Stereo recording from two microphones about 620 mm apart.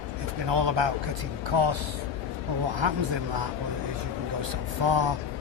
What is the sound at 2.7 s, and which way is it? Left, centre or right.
Speech, right.